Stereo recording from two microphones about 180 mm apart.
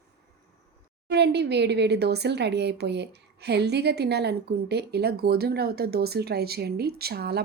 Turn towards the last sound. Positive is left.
turn(degrees=-60)  # may be behind; listen again after turning